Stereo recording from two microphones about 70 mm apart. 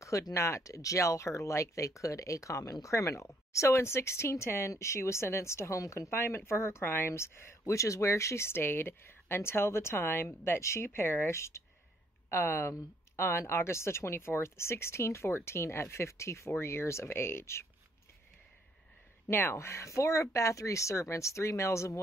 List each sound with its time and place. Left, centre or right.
0.0 s speech: left
19.5 s speech: left